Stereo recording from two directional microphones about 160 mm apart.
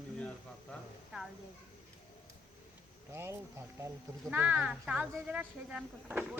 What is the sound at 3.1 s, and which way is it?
Speech, 15° right (ahead or behind).